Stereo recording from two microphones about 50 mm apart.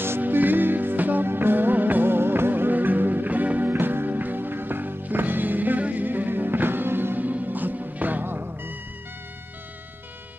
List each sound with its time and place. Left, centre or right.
0.2 s music: right
3.7 s music: right